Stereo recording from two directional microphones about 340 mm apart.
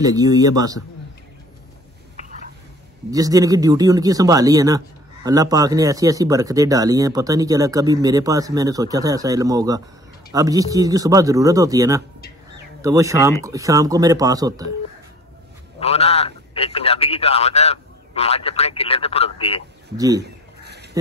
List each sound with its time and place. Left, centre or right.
0.0 s speech: centre
3.1 s speech: centre
15.8 s a man's voice: centre
20.0 s speech: centre